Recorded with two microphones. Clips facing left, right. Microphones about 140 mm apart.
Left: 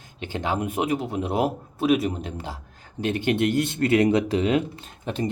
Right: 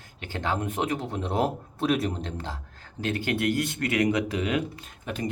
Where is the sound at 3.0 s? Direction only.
20° left (ahead or behind).